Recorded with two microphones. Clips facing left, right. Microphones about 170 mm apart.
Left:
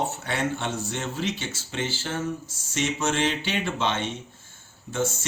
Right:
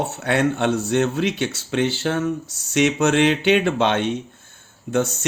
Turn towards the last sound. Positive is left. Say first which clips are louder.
# right 8 dB
turn(degrees=-60)  # may be behind; listen again after turning